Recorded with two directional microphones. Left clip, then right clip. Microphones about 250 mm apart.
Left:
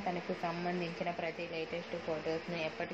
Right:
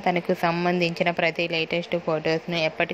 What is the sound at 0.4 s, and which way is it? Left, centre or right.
Speech, right.